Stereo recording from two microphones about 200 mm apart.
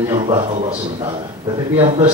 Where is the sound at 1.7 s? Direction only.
25° right (ahead or behind).